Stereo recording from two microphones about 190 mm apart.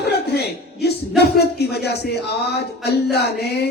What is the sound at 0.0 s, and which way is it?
A man's voice, 60° left (ahead or behind).